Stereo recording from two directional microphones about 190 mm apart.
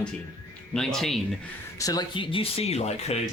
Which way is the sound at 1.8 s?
20° left (ahead or behind).